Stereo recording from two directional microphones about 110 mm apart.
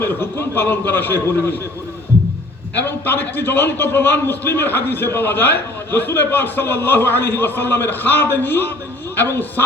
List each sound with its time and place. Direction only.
0.0 s a man's voice: 20° left (ahead or behind)
2.7 s a man's voice: 15° left (ahead or behind)